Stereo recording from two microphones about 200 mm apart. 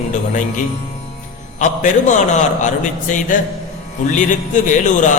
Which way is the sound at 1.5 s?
40° left (ahead or behind).